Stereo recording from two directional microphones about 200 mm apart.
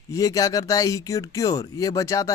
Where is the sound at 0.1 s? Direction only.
15° left (ahead or behind).